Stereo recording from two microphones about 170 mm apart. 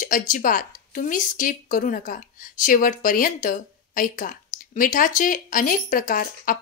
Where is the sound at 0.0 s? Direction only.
50° left (ahead or behind).